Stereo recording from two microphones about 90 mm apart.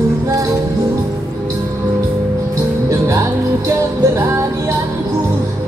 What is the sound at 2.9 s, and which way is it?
Music, 35° right (ahead or behind).